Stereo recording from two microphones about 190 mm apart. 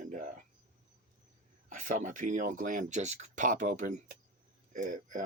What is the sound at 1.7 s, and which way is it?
Speech, 45° right (ahead or behind).